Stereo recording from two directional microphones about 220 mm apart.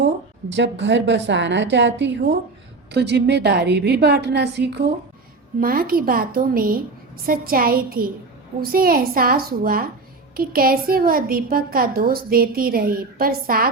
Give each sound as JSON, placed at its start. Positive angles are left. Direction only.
{"t": 0.5, "sound": "a woman's voice", "side_deg": -55}